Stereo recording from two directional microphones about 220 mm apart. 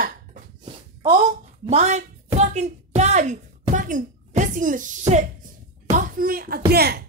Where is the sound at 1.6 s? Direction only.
30° right (ahead or behind).